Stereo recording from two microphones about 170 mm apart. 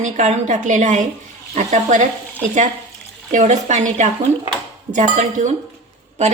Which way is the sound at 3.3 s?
45° right (ahead or behind).